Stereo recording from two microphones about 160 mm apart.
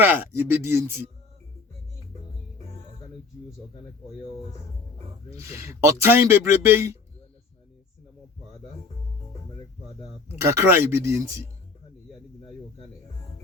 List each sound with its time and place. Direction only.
0.0 s speech: 10° right (ahead or behind)
5.5 s speech: 20° right (ahead or behind)
10.4 s speech: 20° right (ahead or behind)